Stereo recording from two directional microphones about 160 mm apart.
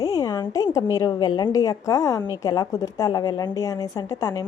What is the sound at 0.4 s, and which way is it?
A woman's voice, 20° left (ahead or behind).